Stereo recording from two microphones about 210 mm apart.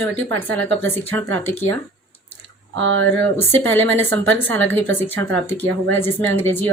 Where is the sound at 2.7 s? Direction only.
65° right (ahead or behind).